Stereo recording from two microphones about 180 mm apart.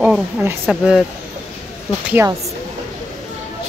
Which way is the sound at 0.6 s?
Centre (ahead or behind).